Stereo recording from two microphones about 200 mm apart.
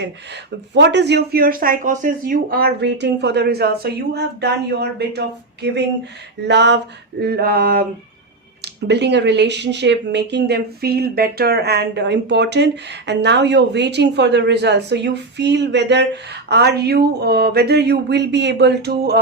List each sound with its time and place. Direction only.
0.7 s speech: 60° right (ahead or behind)
7.2 s a sound: 50° right (ahead or behind)
8.6 s speech: 60° right (ahead or behind)